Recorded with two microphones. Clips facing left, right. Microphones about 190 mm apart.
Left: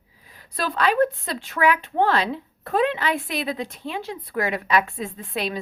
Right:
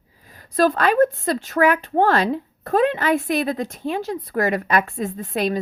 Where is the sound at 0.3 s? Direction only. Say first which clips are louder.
Right 10 dB; 45° right (ahead or behind).